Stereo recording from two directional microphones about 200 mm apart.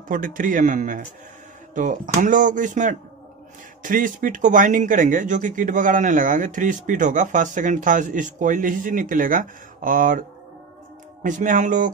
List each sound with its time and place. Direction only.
0.1 s speech: 40° right (ahead or behind)
11.2 s speech: 40° right (ahead or behind)